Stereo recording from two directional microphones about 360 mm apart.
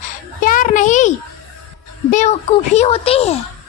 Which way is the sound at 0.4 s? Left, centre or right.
Left.